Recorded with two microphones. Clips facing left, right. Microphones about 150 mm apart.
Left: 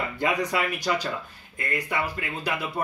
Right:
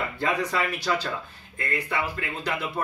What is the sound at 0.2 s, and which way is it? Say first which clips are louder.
Speech: left 1 dB; 15° left (ahead or behind).